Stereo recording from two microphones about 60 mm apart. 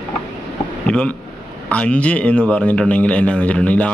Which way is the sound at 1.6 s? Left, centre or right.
Left.